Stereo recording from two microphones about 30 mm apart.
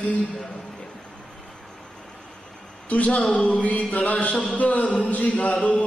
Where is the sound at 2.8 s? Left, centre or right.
Left.